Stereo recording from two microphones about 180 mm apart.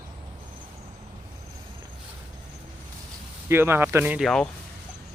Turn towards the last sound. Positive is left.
turn(degrees=-10)  # may be behind; listen again after turning